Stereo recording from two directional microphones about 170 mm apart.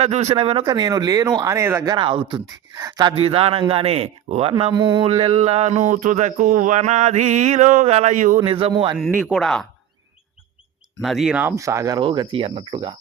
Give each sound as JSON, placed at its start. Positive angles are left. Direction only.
{"t": 0.0, "sound": "speech", "side_deg": -40}
{"t": 5.0, "sound": "speech", "side_deg": -35}
{"t": 8.4, "sound": "speech", "side_deg": -30}
{"t": 9.0, "sound": "speech", "side_deg": -5}
{"t": 11.0, "sound": "speech", "side_deg": 0}